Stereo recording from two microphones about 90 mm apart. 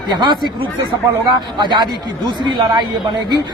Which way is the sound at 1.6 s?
55° right (ahead or behind).